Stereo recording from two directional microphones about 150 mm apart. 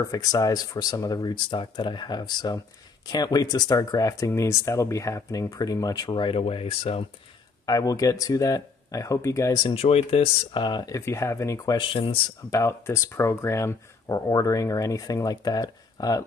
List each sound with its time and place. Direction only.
0.0 s speech: 25° left (ahead or behind); by 7.1 s 40° left (ahead or behind)
7.6 s speech: 25° left (ahead or behind)
9.6 s speech: 35° left (ahead or behind)
12.4 s speech: 20° left (ahead or behind)